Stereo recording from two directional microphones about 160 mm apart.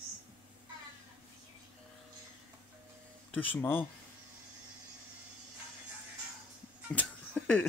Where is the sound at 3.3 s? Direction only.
10° left (ahead or behind).